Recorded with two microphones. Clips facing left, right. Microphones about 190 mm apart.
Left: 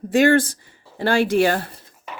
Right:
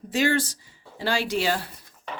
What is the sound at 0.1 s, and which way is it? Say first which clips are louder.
Speech: left 8 dB; 55° left (ahead or behind).